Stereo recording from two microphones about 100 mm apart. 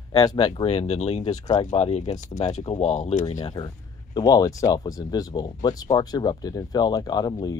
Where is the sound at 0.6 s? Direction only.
85° left.